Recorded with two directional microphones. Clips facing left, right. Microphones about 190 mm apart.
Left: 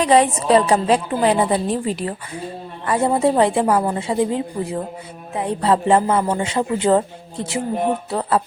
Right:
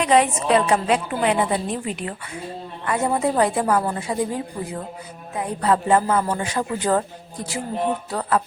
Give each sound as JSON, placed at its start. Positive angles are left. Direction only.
{"t": 0.0, "sound": "a woman's voice", "side_deg": 35}